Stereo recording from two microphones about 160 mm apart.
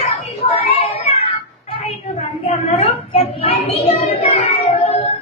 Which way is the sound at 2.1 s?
40° left (ahead or behind).